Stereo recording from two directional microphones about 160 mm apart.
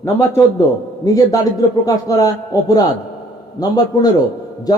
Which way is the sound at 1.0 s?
20° left (ahead or behind).